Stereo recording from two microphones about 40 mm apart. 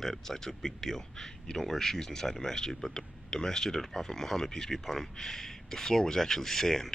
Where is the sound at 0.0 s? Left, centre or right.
Centre.